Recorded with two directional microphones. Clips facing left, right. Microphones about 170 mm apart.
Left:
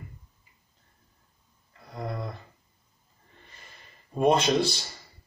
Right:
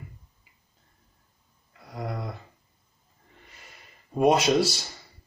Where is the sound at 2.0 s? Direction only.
10° right (ahead or behind).